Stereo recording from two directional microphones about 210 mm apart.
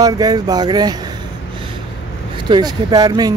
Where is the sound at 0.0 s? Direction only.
20° right (ahead or behind).